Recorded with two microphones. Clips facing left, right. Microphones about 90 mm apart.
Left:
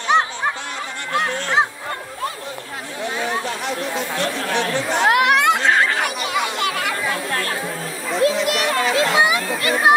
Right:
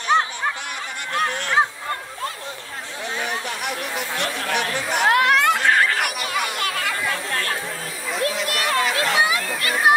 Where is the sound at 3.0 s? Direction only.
20° left (ahead or behind).